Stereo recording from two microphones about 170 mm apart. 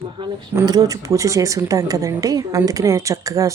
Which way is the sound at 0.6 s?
20° right (ahead or behind).